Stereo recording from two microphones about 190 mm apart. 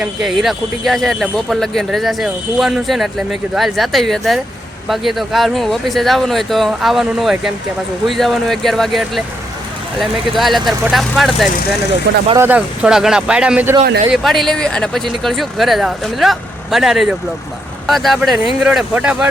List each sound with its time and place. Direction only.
0.0 s speech: centre (ahead or behind)
12.1 s speech: 70° right (ahead or behind)
12.4 s speech: 10° right (ahead or behind)